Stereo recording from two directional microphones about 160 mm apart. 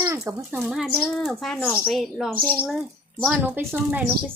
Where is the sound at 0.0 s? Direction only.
15° right (ahead or behind).